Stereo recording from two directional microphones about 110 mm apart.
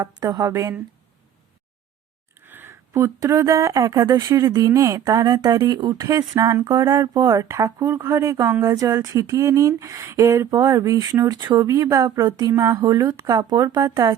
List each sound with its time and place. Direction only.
0.0 s speech: 30° right (ahead or behind)
2.4 s speech: 20° right (ahead or behind); by 13.9 s 40° right (ahead or behind)